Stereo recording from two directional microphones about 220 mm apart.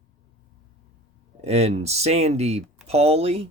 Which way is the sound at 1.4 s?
30° right (ahead or behind).